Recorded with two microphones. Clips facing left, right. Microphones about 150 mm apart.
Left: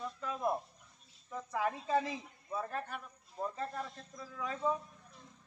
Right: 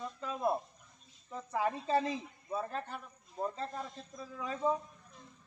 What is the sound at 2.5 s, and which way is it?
A man's voice, 25° right (ahead or behind).